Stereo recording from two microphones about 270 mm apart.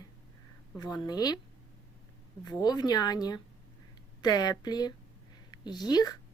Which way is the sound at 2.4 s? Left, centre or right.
Centre.